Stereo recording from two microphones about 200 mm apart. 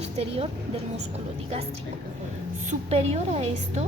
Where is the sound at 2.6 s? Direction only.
30° right (ahead or behind).